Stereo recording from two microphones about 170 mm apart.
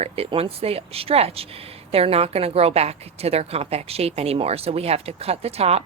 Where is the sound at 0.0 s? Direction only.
35° right (ahead or behind).